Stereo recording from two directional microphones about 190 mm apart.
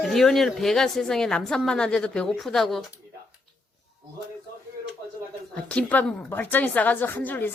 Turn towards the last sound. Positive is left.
turn(degrees=10)  # may be behind; listen again after turning